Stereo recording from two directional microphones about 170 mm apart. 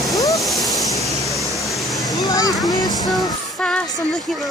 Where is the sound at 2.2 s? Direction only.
20° left (ahead or behind).